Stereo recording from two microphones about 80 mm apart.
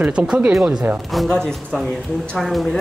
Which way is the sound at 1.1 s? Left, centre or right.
Centre.